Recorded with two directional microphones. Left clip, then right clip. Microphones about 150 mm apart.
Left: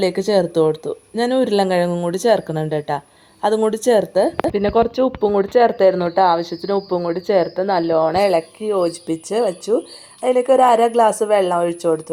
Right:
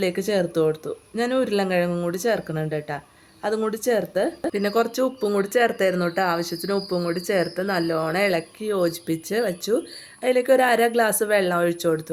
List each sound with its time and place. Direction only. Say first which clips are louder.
0.0 s speech: left 6 dB; 30° left (ahead or behind); by 12.0 s 15° left (ahead or behind)